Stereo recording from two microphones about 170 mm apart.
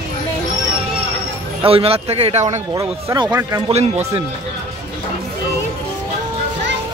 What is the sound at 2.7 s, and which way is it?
Speech, 20° right (ahead or behind).